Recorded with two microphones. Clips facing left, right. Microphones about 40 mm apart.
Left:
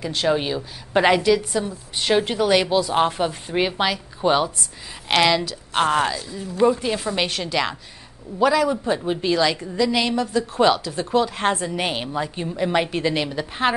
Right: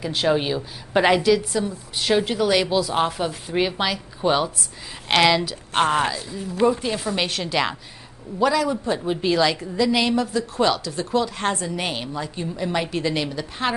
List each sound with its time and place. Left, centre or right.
0.0 s a woman's voice: centre
8.4 s a woman's voice: centre